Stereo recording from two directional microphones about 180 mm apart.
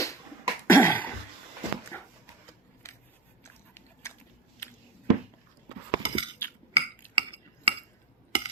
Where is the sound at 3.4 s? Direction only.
15° left (ahead or behind).